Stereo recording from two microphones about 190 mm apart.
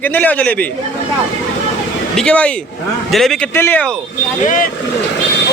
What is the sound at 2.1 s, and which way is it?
Speech, 5° left (ahead or behind).